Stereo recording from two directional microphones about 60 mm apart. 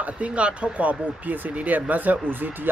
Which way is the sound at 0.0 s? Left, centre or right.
Right.